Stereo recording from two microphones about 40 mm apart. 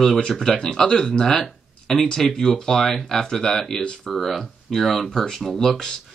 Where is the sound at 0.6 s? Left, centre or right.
Centre.